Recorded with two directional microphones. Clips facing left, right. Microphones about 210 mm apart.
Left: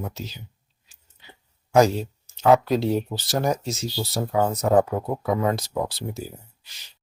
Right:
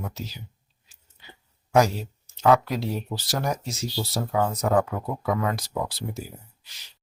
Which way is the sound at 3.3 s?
25° left (ahead or behind).